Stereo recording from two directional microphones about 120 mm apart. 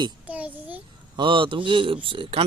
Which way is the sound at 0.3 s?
10° right (ahead or behind).